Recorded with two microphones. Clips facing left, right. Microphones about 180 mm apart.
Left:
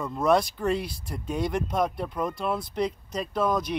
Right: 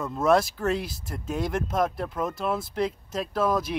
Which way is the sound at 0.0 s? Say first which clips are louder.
Right 1 dB; centre (ahead or behind).